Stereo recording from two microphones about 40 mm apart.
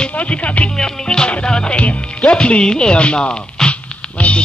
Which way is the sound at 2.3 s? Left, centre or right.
Left.